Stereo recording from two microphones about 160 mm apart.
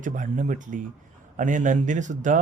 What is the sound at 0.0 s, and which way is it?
A man's voice, 55° right (ahead or behind).